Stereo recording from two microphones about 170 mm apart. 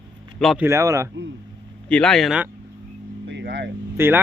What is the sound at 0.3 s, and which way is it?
Speech, centre (ahead or behind).